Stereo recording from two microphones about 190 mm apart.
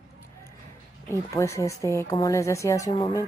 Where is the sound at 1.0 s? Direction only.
15° left (ahead or behind).